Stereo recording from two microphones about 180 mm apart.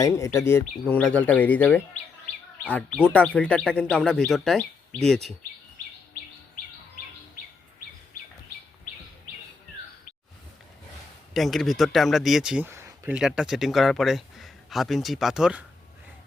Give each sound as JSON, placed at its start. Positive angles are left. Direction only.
{"t": 0.0, "sound": "speech", "side_deg": 15}
{"t": 11.3, "sound": "speech", "side_deg": 0}